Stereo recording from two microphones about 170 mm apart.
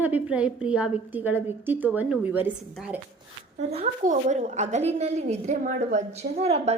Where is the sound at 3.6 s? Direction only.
40° right (ahead or behind).